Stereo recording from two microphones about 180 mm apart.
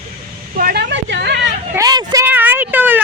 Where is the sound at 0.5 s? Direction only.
60° right (ahead or behind).